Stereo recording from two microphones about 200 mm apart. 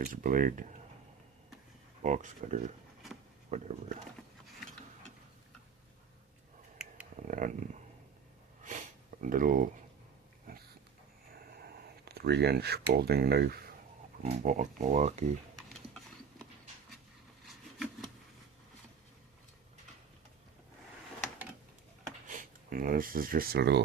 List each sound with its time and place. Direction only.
0.0 s speech: 40° right (ahead or behind)
2.0 s speech: 35° right (ahead or behind)
7.3 s speech: 40° right (ahead or behind)
8.6 s sniff: 40° right (ahead or behind)
12.0 s speech: 55° right (ahead or behind)
14.2 s speech: 35° right (ahead or behind)
17.4 s a sound: centre (ahead or behind)
22.3 s speech: 45° right (ahead or behind)